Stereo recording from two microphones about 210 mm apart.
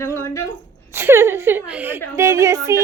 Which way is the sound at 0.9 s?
10° right (ahead or behind).